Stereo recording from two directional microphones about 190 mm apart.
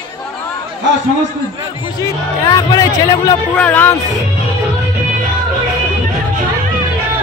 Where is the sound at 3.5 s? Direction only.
10° left (ahead or behind).